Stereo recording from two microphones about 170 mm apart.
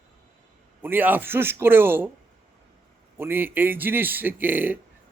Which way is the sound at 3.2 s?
15° right (ahead or behind).